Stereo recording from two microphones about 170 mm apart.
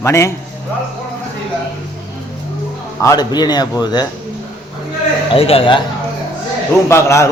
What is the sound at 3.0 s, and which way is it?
A man's voice, 20° left (ahead or behind).